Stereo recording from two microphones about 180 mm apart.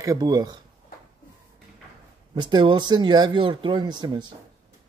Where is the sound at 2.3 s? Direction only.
25° right (ahead or behind).